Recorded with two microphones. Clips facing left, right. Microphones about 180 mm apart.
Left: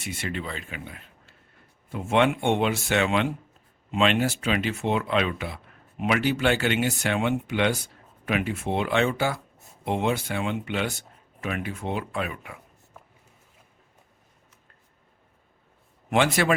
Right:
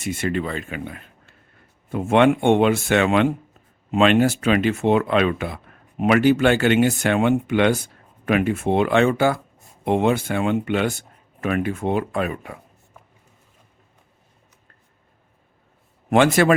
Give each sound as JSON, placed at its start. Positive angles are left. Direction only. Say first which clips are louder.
{"t": 0.0, "sound": "speech", "louder": "right 8 dB", "side_deg": -50}
{"t": 16.0, "sound": "speech", "louder": "right 6 dB", "side_deg": -50}